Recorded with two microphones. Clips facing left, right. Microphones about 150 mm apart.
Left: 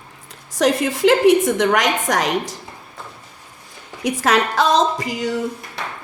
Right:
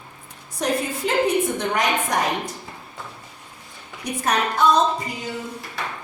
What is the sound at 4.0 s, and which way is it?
A woman's voice, 90° left.